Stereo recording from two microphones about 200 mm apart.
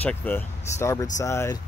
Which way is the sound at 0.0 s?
10° left (ahead or behind).